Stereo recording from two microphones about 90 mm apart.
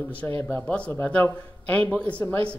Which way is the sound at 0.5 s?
15° left (ahead or behind).